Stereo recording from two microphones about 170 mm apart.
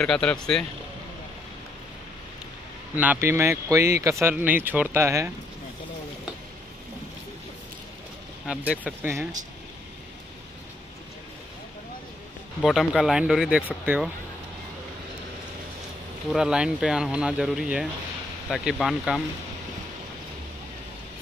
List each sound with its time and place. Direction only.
0.0 s speech: 5° left (ahead or behind)
3.0 s speech: 10° right (ahead or behind)
8.5 s speech: 10° right (ahead or behind)
12.6 s speech: centre (ahead or behind)
16.3 s speech: 5° right (ahead or behind)